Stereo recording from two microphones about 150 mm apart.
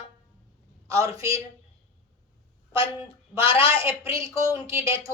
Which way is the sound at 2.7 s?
35° left (ahead or behind).